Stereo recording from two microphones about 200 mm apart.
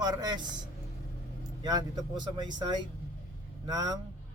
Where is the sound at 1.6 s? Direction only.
20° right (ahead or behind).